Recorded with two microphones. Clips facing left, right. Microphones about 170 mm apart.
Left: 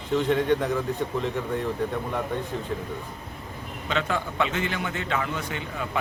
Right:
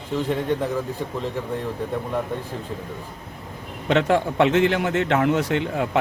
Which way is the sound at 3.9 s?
65° right (ahead or behind).